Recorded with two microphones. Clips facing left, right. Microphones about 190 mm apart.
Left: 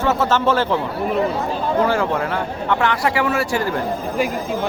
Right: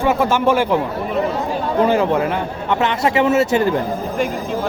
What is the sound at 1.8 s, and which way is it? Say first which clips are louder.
Speech: right 4 dB; 20° right (ahead or behind).